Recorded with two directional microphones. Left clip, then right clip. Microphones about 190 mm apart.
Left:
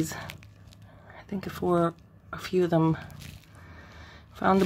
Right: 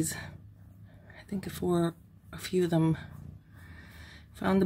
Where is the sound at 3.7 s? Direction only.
20° right (ahead or behind).